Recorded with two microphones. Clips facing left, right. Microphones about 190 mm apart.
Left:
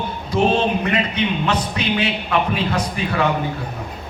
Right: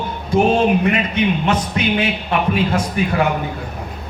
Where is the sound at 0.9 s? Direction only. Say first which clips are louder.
Right 2 dB; 25° right (ahead or behind).